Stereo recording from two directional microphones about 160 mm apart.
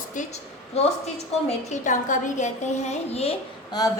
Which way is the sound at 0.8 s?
40° left (ahead or behind).